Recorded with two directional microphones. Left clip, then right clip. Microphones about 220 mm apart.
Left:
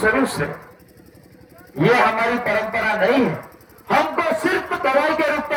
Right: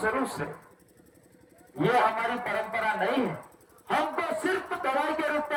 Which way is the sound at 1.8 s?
55° right (ahead or behind).